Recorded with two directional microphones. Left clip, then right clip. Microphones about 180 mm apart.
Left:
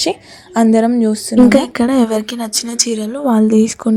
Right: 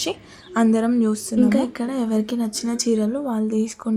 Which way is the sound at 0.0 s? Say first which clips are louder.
Left 9 dB; 25° left (ahead or behind).